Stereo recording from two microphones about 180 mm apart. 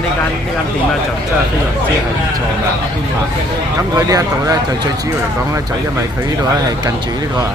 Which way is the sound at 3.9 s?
20° right (ahead or behind).